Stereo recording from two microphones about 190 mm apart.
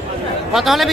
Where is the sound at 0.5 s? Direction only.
Centre (ahead or behind).